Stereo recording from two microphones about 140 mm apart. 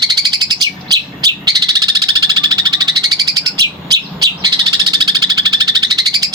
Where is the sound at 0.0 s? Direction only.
30° right (ahead or behind).